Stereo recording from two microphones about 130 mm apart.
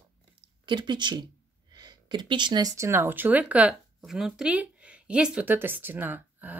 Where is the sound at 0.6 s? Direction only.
35° right (ahead or behind).